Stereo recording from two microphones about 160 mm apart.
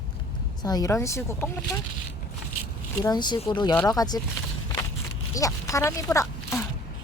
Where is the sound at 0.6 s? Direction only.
25° left (ahead or behind).